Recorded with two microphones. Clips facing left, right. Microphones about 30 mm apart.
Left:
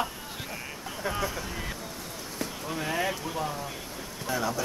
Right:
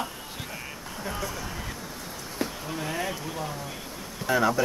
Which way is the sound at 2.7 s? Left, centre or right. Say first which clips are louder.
Left 1 dB; centre.